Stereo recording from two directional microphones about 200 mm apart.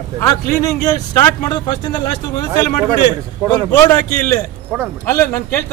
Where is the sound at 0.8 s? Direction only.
15° left (ahead or behind).